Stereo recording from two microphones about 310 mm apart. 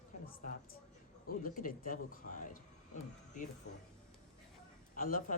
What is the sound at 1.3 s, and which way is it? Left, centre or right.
Speech, left.